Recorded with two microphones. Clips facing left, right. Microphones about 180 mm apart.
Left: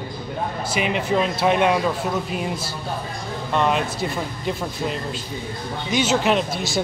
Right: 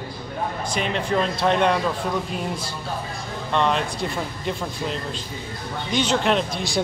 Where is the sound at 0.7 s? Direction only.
5° left (ahead or behind).